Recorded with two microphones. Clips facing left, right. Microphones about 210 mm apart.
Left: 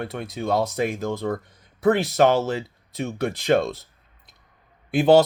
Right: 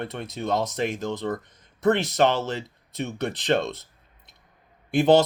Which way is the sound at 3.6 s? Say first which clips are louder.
Left 3 dB; 20° right (ahead or behind).